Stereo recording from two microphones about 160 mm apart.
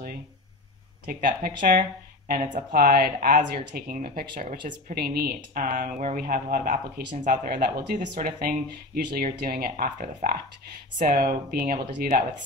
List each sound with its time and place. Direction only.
1.0 s speech: 55° right (ahead or behind)